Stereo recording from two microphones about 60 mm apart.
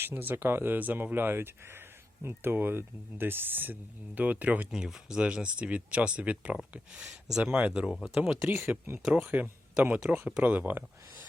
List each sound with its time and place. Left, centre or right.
0.0 s speech: right
4.7 s speech: centre
7.1 s speech: centre
7.5 s speech: right
8.1 s speech: centre
8.4 s speech: right